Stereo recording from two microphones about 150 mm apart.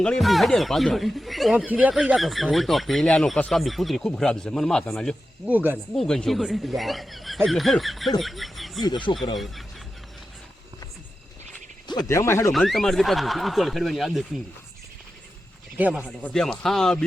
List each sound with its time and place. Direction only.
0.0 s speech: 5° left (ahead or behind)
5.5 s speech: 10° right (ahead or behind)
5.9 s speech: 5° left (ahead or behind)
8.8 s speech: 30° left (ahead or behind)
9.3 s speech: centre (ahead or behind)
11.9 s speech: 25° left (ahead or behind)
12.5 s speech: centre (ahead or behind)
15.8 s speech: 10° right (ahead or behind)
16.0 s speech: 5° left (ahead or behind)